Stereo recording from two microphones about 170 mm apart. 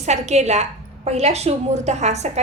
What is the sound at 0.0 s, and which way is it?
A woman's voice, 40° right (ahead or behind).